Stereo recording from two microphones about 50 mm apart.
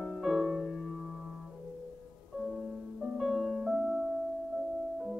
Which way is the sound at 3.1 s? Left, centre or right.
Centre.